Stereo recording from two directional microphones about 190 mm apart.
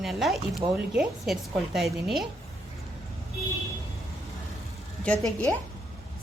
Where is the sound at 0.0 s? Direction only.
Centre (ahead or behind).